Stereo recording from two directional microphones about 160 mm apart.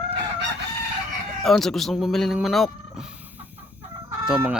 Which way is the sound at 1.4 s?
Centre (ahead or behind).